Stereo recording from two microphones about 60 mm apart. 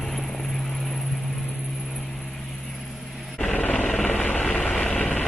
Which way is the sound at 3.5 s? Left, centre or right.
Left.